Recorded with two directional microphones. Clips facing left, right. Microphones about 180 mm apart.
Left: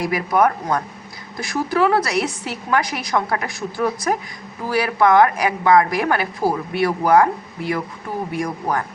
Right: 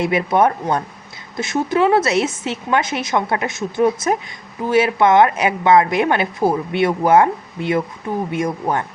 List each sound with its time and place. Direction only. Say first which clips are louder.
0.0 s a woman's voice: right 2 dB; 25° right (ahead or behind)